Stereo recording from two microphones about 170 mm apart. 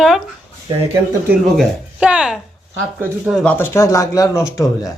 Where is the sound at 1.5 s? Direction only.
5° right (ahead or behind); by 4.9 s 20° left (ahead or behind).